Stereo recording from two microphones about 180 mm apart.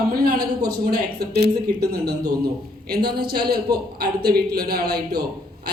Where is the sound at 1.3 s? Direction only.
65° right (ahead or behind).